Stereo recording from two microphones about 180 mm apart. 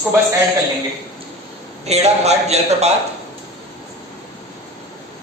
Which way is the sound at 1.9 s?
35° right (ahead or behind).